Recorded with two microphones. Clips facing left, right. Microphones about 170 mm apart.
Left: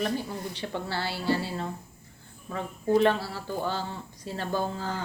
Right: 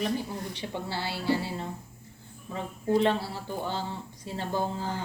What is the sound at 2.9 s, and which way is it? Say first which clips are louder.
Speech: left 2 dB; 20° right (ahead or behind).